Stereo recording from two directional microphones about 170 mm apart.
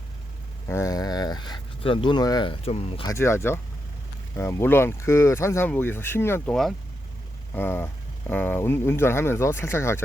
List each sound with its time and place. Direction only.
0.7 s speech: 20° left (ahead or behind); by 3.1 s 35° left (ahead or behind)
3.1 s speech: 15° left (ahead or behind)